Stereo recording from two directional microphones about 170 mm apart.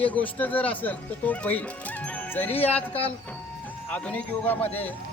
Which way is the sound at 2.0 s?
10° left (ahead or behind).